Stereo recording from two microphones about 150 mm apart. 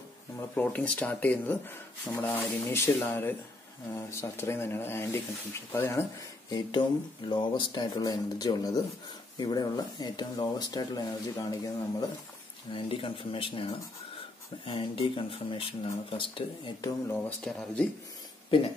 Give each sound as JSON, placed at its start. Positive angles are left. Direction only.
{"t": 0.6, "sound": "speech", "side_deg": 10}
{"t": 7.2, "sound": "speech", "side_deg": 30}
{"t": 12.7, "sound": "speech", "side_deg": 35}
{"t": 17.1, "sound": "speech", "side_deg": 5}